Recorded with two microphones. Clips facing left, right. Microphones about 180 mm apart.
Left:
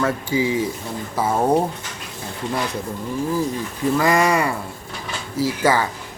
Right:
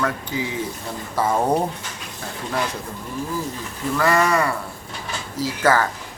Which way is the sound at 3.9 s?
15° left (ahead or behind).